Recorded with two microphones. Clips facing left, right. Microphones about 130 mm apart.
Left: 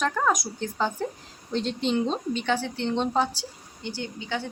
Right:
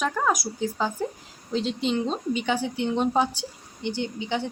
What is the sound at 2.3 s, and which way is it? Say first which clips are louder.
A woman's voice: right 1 dB; 10° right (ahead or behind).